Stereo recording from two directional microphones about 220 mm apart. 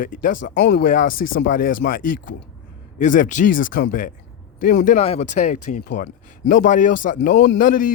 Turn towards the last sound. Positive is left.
turn(degrees=40)  # may be behind; listen again after turning